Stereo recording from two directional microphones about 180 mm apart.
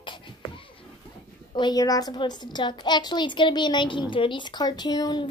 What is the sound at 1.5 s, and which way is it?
A woman's voice, 25° left (ahead or behind).